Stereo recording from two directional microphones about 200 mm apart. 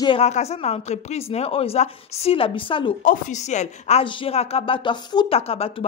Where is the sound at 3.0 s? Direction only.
40° left (ahead or behind).